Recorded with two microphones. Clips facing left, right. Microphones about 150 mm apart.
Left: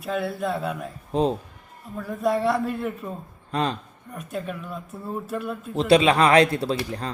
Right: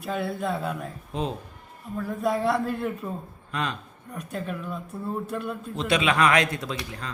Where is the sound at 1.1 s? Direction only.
35° left (ahead or behind).